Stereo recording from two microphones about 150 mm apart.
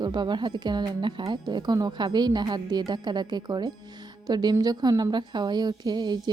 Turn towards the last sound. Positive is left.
turn(degrees=-30)  # may be behind; listen again after turning